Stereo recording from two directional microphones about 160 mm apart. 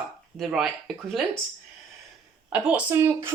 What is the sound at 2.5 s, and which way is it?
Speech, 10° right (ahead or behind).